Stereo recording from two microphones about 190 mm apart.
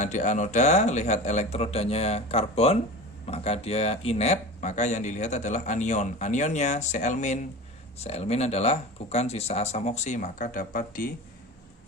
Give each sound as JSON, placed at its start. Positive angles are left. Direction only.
{"t": 0.0, "sound": "speech", "side_deg": 40}